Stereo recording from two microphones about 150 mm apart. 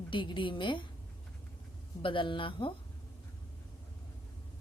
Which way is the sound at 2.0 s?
35° left (ahead or behind).